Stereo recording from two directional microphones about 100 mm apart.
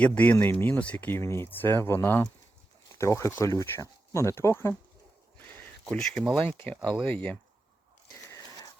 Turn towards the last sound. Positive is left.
turn(degrees=15)  # may be behind; listen again after turning